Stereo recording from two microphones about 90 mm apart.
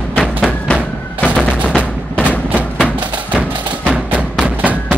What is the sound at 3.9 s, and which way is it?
Music, 15° right (ahead or behind).